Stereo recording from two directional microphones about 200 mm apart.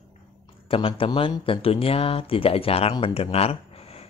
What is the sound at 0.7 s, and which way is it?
Speech, 25° left (ahead or behind).